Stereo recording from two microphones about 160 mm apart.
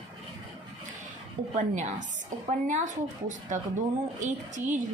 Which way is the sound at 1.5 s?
45° right (ahead or behind).